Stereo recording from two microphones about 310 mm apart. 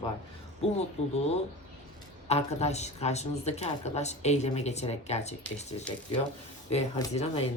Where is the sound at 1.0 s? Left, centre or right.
Centre.